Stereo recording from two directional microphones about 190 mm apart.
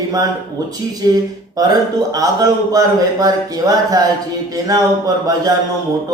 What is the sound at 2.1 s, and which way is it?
Mantra, 20° right (ahead or behind).